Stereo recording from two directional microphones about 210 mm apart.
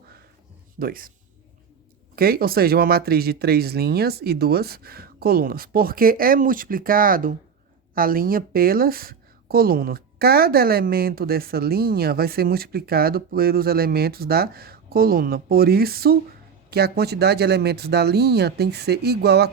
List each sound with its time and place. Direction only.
0.8 s speech: 45° right (ahead or behind)
2.1 s speech: 45° right (ahead or behind)